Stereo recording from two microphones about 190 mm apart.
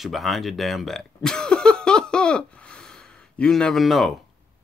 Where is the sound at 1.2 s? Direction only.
5° left (ahead or behind).